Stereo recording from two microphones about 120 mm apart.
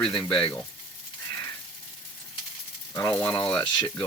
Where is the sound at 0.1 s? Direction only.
45° left (ahead or behind).